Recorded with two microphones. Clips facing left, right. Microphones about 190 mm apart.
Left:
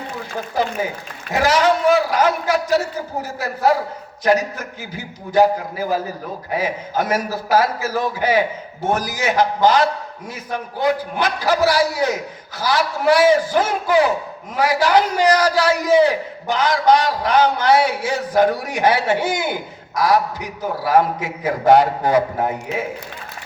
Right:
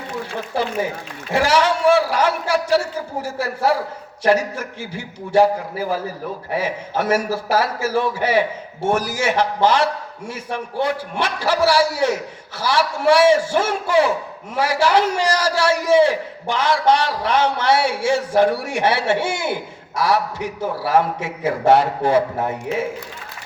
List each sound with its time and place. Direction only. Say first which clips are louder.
1.3 s a man's voice: left 1 dB; 30° right (ahead or behind)
6.5 s a man's voice: left 1 dB; 30° right (ahead or behind)